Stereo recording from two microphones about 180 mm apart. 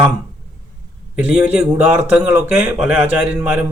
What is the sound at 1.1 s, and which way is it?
Speech, 10° right (ahead or behind).